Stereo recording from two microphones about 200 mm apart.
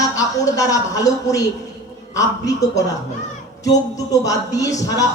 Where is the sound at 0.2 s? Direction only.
15° left (ahead or behind).